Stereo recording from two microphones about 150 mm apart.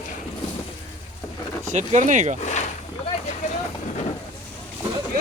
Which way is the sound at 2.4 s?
50° left (ahead or behind).